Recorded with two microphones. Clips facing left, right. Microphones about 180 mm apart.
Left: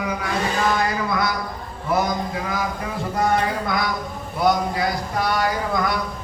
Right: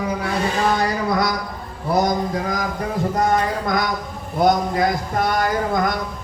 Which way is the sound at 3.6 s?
45° right (ahead or behind).